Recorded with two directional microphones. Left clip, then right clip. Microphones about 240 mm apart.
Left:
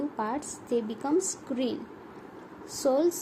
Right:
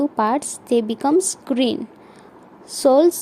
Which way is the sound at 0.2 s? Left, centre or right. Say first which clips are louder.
Right 12 dB; right.